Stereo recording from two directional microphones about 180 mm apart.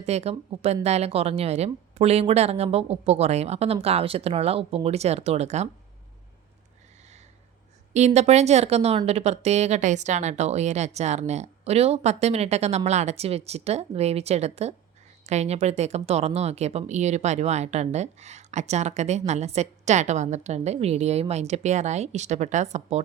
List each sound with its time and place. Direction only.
0.0 s speech: 35° right (ahead or behind)
7.9 s speech: 40° right (ahead or behind)